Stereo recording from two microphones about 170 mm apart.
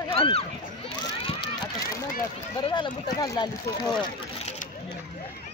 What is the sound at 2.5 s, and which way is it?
Speech, 25° left (ahead or behind).